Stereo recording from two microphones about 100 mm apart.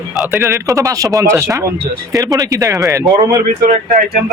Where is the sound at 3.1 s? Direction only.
Centre (ahead or behind).